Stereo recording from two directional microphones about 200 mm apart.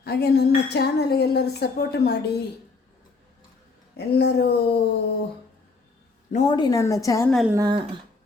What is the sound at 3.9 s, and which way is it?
Speech, 55° left (ahead or behind).